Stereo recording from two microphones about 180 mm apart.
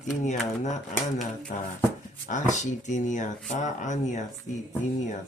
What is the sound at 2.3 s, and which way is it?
Speech, 40° left (ahead or behind).